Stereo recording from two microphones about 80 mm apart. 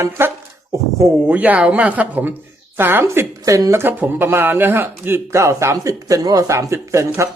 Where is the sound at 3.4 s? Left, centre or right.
Right.